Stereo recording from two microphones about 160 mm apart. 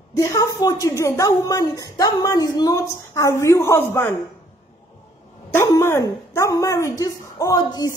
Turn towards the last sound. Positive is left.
turn(degrees=20)  # may be behind; listen again after turning